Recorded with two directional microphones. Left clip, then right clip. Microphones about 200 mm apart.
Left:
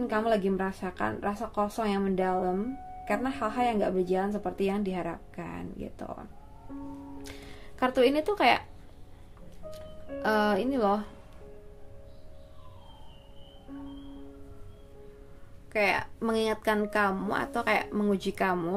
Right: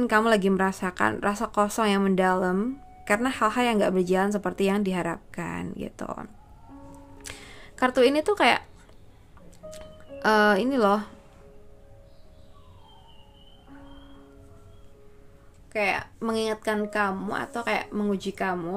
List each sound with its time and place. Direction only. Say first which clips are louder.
0.0 s a woman's voice: right 6 dB; 30° right (ahead or behind)
7.2 s music: right 3 dB; 25° right (ahead or behind)
9.7 s speech: even; 25° right (ahead or behind)
15.7 s speech: right 1 dB; centre (ahead or behind)